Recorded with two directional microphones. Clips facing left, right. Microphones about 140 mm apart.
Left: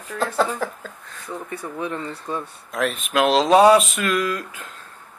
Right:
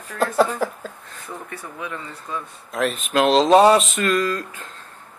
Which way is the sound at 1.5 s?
35° left (ahead or behind).